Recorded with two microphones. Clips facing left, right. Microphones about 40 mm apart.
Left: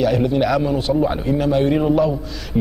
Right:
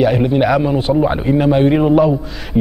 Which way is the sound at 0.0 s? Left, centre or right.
Right.